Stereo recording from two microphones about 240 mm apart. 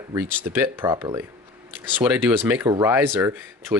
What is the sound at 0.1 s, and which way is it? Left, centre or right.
Speech, centre.